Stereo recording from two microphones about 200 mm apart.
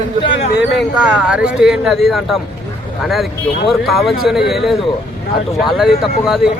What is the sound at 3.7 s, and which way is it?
Speech, centre (ahead or behind).